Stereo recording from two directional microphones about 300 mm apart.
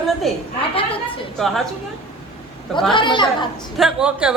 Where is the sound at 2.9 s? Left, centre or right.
Centre.